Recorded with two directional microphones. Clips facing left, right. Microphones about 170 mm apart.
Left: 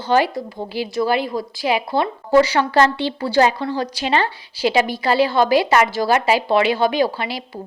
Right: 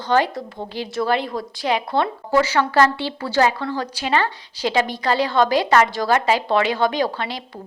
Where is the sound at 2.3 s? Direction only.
20° left (ahead or behind).